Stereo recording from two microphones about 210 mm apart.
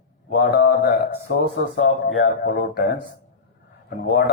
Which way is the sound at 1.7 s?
65° left (ahead or behind).